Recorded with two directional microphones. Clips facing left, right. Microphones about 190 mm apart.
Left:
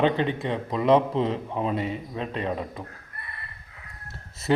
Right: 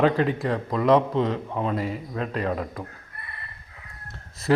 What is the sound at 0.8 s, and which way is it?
Speech, 25° left (ahead or behind).